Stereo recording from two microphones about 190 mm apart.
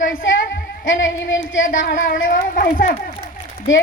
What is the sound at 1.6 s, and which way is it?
A woman's voice, 45° left (ahead or behind).